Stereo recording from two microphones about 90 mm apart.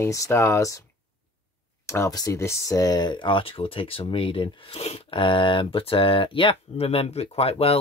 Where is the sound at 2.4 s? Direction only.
35° left (ahead or behind).